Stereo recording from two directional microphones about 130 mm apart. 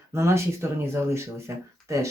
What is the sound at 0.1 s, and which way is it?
Speech, 20° right (ahead or behind).